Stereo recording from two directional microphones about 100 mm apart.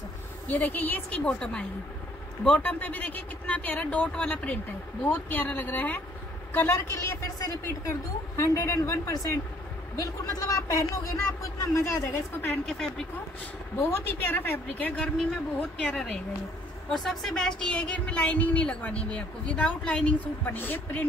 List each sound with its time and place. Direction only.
0.5 s a woman's voice: 15° left (ahead or behind)
12.6 s speech: 5° left (ahead or behind)
13.7 s a woman's voice: 25° left (ahead or behind)